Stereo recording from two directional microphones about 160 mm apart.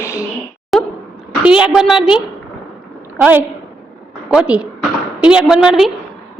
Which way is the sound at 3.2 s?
10° right (ahead or behind).